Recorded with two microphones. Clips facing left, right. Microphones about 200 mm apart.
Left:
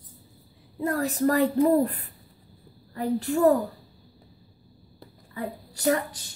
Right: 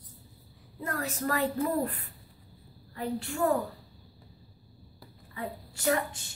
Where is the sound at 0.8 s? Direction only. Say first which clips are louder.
Left 9 dB; 35° left (ahead or behind).